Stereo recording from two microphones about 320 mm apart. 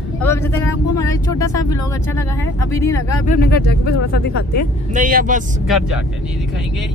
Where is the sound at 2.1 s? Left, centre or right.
Centre.